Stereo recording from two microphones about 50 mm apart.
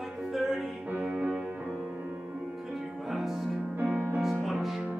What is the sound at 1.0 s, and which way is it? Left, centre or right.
Music, centre.